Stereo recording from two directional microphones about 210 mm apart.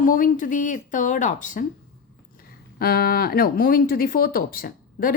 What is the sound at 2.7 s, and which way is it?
Speech, 45° left (ahead or behind).